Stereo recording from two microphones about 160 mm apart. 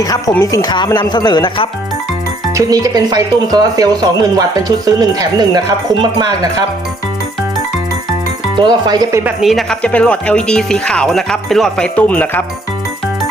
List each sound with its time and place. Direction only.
0.0 s speech: 25° left (ahead or behind)
2.6 s speech: 20° right (ahead or behind)
8.5 s speech: 25° right (ahead or behind)
9.2 s speech: centre (ahead or behind)